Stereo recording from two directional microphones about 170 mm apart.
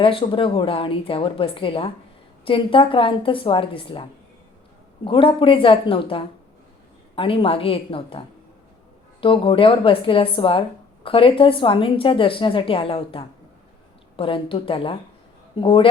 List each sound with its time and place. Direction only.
0.0 s a woman's voice: 30° left (ahead or behind)
5.0 s a woman's voice: 30° left (ahead or behind)
9.2 s a woman's voice: 30° left (ahead or behind)